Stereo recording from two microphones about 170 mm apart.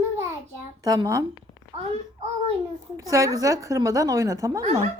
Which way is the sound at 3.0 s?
20° right (ahead or behind).